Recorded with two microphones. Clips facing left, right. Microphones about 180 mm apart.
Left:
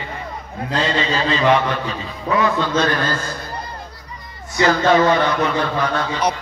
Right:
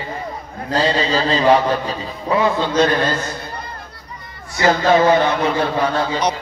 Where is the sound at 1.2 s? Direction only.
35° right (ahead or behind).